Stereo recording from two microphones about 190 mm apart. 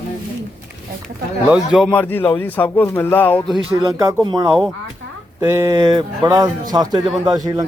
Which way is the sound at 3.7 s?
15° right (ahead or behind).